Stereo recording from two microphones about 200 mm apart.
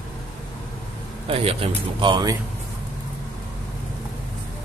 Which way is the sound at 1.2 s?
30° right (ahead or behind).